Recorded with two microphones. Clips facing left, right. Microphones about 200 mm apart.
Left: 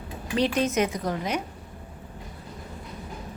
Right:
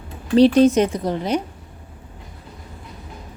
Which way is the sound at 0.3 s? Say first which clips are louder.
Right 11 dB; 35° right (ahead or behind).